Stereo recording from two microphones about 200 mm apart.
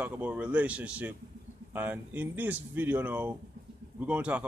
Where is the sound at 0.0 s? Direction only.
5° right (ahead or behind).